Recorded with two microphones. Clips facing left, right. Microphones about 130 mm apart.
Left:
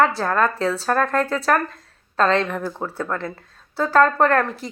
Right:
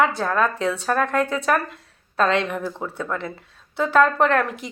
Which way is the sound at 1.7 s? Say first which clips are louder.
Right 2 dB; 10° right (ahead or behind).